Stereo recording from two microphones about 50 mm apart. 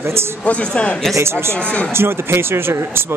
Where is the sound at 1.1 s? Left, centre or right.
Right.